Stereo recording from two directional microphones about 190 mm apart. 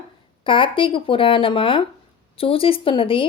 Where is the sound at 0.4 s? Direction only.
25° left (ahead or behind).